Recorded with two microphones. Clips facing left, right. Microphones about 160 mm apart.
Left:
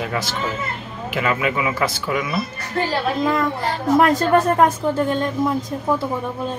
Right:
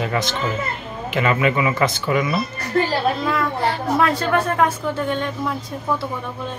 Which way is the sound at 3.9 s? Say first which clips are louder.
Left 6 dB; 40° left (ahead or behind).